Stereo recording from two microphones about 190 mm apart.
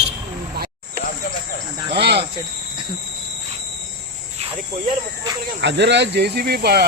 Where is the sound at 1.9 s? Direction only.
60° right (ahead or behind).